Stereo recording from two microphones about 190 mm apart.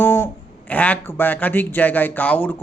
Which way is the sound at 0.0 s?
10° left (ahead or behind).